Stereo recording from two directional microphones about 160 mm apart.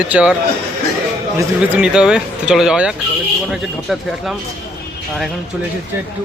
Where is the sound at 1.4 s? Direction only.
10° right (ahead or behind).